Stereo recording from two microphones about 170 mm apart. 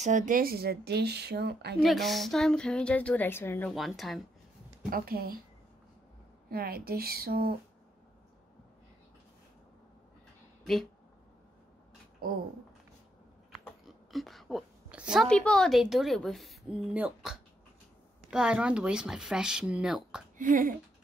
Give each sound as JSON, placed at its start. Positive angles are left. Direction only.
{"t": 0.0, "sound": "speech", "side_deg": -50}
{"t": 1.8, "sound": "a woman's voice", "side_deg": 0}
{"t": 3.7, "sound": "a woman's voice", "side_deg": 0}
{"t": 4.8, "sound": "speech", "side_deg": -60}
{"t": 6.5, "sound": "speech", "side_deg": -60}
{"t": 12.2, "sound": "speech", "side_deg": -60}
{"t": 13.8, "sound": "a woman's voice", "side_deg": 0}
{"t": 20.3, "sound": "speech", "side_deg": -50}